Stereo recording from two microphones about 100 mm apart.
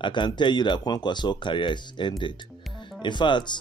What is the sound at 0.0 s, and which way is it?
Speech, 50° left (ahead or behind).